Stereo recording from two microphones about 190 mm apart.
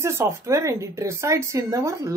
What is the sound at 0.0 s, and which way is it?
Speech, 15° right (ahead or behind).